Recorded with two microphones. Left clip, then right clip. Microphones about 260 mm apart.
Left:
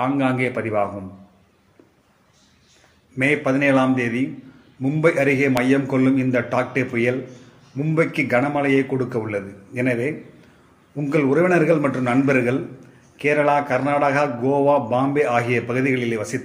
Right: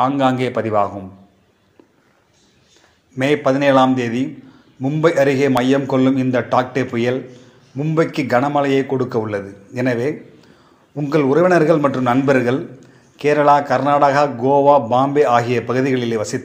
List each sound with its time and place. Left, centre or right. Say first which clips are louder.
0.0 s a man's voice: right 5 dB; centre
3.2 s a man's voice: right 3 dB; centre